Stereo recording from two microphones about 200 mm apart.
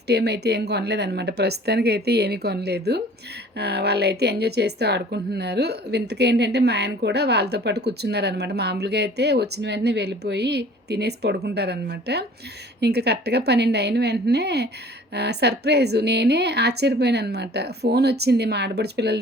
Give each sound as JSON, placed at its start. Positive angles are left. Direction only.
{"t": 0.1, "sound": "a woman's voice", "side_deg": -55}